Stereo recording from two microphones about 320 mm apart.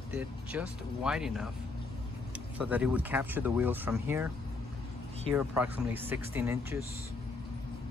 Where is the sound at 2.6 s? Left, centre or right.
Centre.